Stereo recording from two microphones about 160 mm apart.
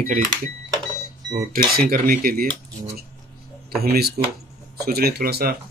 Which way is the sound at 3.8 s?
75° right (ahead or behind).